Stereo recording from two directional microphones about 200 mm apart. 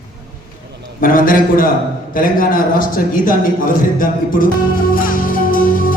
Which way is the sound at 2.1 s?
45° left (ahead or behind).